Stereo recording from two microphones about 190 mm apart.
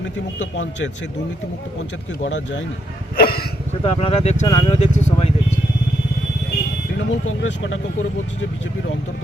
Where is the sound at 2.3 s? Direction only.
75° left (ahead or behind).